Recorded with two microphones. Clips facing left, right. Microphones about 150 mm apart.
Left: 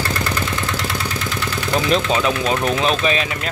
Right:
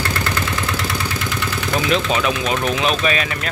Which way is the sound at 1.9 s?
25° left (ahead or behind).